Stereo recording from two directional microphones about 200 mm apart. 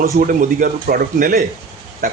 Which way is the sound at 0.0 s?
45° right (ahead or behind).